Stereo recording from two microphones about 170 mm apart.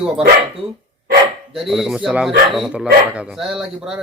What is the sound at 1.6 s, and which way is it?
Speech, centre (ahead or behind).